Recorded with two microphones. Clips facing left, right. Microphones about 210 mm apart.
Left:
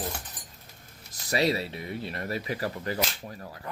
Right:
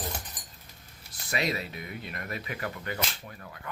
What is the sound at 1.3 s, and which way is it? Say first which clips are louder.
Speech: left 5 dB; 35° left (ahead or behind).